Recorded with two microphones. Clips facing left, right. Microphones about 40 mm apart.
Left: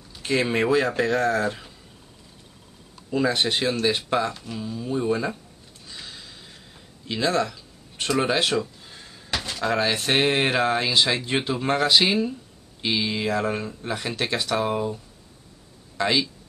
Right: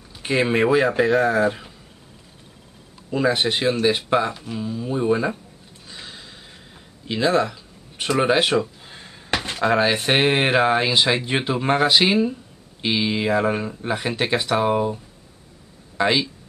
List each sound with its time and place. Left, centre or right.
0.1 s speech: centre
3.1 s speech: centre
5.9 s a sound: centre
7.1 s speech: centre
16.0 s speech: centre